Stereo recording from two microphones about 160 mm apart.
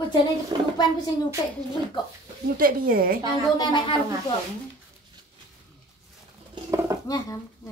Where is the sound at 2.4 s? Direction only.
65° right (ahead or behind).